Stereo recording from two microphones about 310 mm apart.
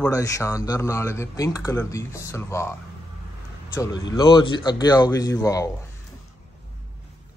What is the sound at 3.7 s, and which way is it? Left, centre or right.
Speech, centre.